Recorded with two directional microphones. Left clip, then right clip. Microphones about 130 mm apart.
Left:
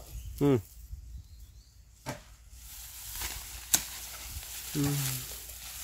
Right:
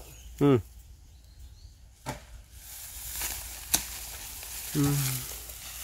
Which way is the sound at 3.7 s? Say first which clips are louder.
Even; 5° left (ahead or behind).